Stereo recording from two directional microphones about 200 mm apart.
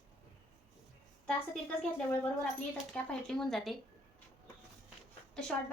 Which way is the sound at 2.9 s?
5° left (ahead or behind).